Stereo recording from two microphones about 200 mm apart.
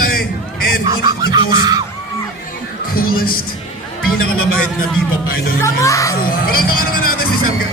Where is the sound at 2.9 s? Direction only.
45° left (ahead or behind).